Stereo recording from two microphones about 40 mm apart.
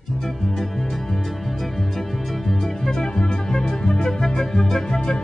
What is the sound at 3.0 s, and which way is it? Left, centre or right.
Music, centre.